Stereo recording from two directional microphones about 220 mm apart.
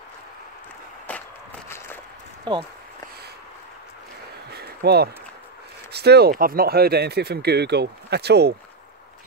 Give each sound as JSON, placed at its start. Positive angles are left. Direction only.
{"t": 2.5, "sound": "speech", "side_deg": -20}
{"t": 4.5, "sound": "a sound", "side_deg": -45}
{"t": 5.9, "sound": "speech", "side_deg": -50}